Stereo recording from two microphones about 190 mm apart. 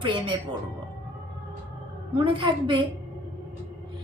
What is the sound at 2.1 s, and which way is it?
Speech, 25° right (ahead or behind).